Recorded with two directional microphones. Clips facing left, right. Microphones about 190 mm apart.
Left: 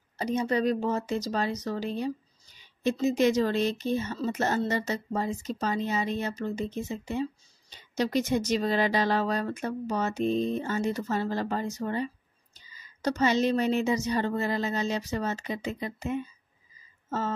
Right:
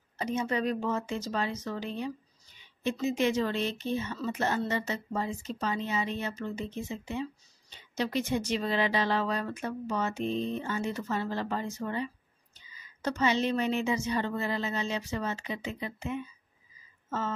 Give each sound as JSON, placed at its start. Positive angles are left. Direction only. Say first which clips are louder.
{"t": 0.2, "sound": "speech", "louder": "left 4 dB", "side_deg": 35}